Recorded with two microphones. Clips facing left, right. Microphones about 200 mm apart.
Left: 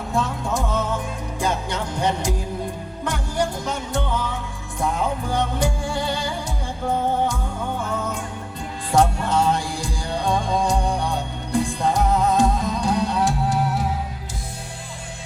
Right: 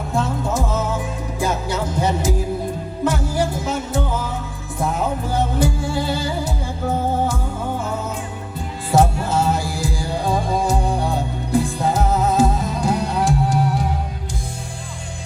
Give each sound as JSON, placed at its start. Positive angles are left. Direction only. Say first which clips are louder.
{"t": 0.1, "sound": "music", "louder": "right 2 dB", "side_deg": 0}